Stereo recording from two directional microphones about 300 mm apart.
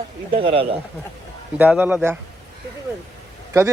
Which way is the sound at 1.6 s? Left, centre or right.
Centre.